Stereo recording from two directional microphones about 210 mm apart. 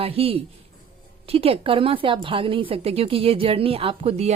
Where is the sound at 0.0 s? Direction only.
25° right (ahead or behind).